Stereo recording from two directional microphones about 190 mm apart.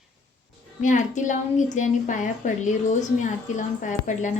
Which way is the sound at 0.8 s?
40° left (ahead or behind).